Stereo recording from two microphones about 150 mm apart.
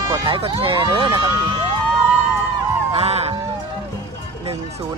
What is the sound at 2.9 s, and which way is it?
Music, 45° right (ahead or behind).